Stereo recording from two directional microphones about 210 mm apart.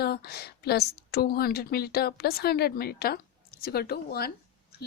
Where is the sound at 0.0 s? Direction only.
50° left (ahead or behind).